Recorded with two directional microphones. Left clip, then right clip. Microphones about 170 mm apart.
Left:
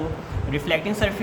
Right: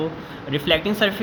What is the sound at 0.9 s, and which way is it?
Speech, 40° right (ahead or behind).